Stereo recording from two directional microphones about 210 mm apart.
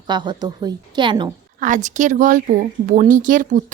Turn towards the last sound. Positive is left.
turn(degrees=-40)  # may be behind; listen again after turning